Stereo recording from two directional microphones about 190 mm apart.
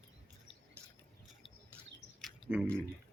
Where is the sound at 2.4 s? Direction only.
20° left (ahead or behind).